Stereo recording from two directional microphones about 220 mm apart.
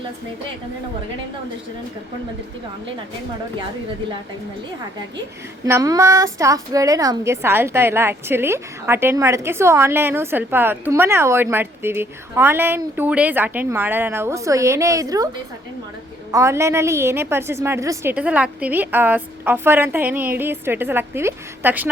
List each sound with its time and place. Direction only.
5.6 s a woman's voice: 15° right (ahead or behind)
16.3 s a woman's voice: 15° right (ahead or behind)